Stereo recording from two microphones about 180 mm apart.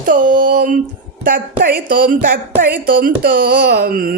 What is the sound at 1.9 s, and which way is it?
Speech, 50° right (ahead or behind).